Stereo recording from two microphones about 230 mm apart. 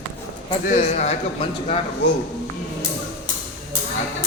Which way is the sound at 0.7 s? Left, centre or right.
Left.